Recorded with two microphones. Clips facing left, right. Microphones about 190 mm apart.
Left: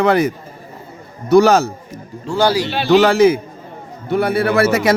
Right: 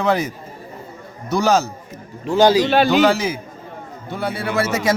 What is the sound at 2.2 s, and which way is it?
Speech, 20° right (ahead or behind).